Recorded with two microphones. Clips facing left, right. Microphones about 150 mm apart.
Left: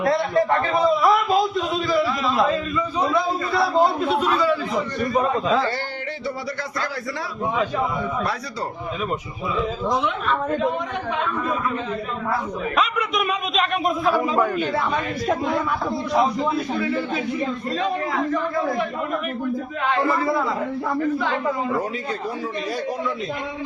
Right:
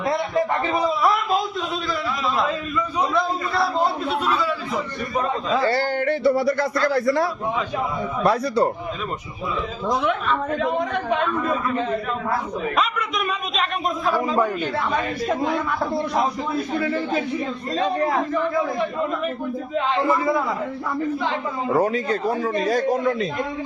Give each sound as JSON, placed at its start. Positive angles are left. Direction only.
{"t": 0.0, "sound": "a man's voice", "side_deg": -20}
{"t": 1.0, "sound": "a man's voice", "side_deg": 0}
{"t": 3.2, "sound": "a man's voice", "side_deg": 0}
{"t": 5.1, "sound": "a man's voice", "side_deg": 20}
{"t": 6.1, "sound": "a man's voice", "side_deg": -60}
{"t": 12.7, "sound": "a man's voice", "side_deg": 0}
{"t": 17.7, "sound": "a man's voice", "side_deg": -40}
{"t": 19.9, "sound": "a man's voice", "side_deg": -20}
{"t": 22.6, "sound": "a man's voice", "side_deg": -45}